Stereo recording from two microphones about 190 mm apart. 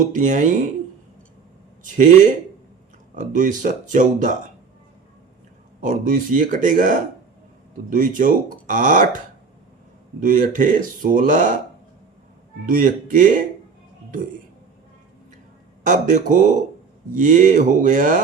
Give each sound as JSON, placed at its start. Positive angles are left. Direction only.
{"t": 0.0, "sound": "speech", "side_deg": -40}
{"t": 1.8, "sound": "speech", "side_deg": -40}
{"t": 5.8, "sound": "speech", "side_deg": -45}
{"t": 12.6, "sound": "speech", "side_deg": -45}
{"t": 15.8, "sound": "speech", "side_deg": -40}